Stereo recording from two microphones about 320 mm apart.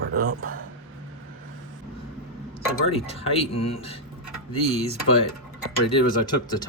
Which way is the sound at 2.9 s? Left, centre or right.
Centre.